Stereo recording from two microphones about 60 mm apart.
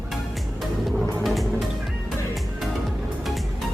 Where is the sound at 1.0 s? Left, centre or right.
Centre.